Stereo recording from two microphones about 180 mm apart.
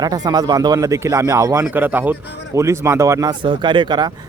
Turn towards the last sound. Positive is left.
turn(degrees=-25)  # may be behind; listen again after turning